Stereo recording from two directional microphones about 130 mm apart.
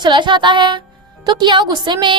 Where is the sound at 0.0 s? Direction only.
35° right (ahead or behind).